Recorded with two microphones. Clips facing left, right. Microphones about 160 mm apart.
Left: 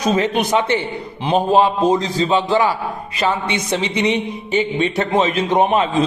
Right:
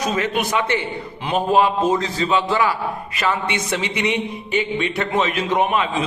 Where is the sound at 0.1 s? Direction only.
30° left (ahead or behind).